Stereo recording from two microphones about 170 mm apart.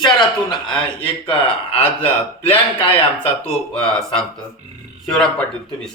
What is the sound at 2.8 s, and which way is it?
Speech, 30° left (ahead or behind).